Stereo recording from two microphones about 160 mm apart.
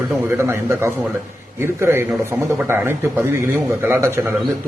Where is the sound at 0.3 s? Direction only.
15° right (ahead or behind).